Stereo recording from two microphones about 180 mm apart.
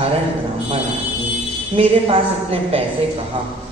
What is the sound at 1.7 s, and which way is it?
Speech, 30° right (ahead or behind).